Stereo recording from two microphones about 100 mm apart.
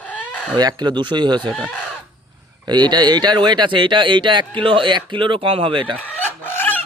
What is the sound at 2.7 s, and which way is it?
Speech, 45° right (ahead or behind).